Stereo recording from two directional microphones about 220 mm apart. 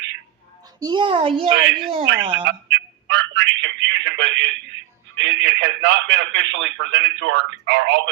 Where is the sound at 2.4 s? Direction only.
55° right (ahead or behind).